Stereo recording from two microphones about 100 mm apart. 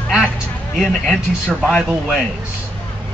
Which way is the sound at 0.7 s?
Centre (ahead or behind).